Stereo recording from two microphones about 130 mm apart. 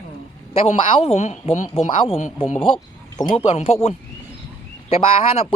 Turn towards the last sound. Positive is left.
turn(degrees=45)  # may be behind; listen again after turning